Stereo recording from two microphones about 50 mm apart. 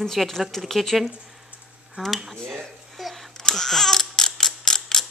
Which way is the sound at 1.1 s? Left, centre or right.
Centre.